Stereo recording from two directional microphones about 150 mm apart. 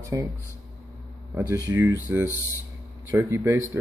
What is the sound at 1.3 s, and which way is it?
Speech, 20° right (ahead or behind).